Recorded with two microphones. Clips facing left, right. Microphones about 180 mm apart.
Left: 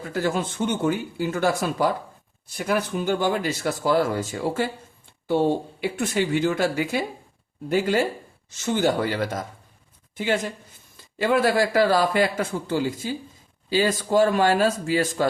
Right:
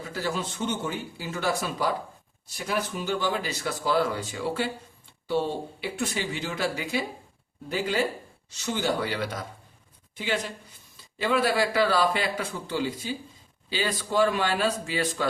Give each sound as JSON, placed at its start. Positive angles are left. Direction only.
{"t": 0.1, "sound": "speech", "side_deg": 50}